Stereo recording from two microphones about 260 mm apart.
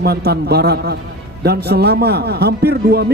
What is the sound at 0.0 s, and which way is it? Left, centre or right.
Speech, right.